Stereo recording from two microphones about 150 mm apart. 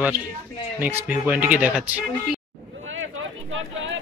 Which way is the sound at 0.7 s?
15° right (ahead or behind).